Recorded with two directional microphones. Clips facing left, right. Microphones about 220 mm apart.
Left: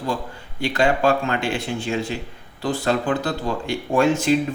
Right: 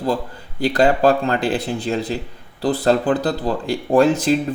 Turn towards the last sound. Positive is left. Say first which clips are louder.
# right 3 dB
turn(degrees=-35)  # may be behind; listen again after turning